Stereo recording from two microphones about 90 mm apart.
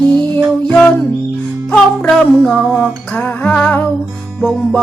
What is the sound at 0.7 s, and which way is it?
Music, 10° left (ahead or behind).